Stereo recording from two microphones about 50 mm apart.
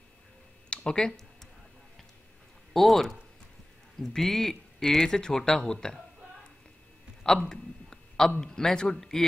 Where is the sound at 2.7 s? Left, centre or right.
Centre.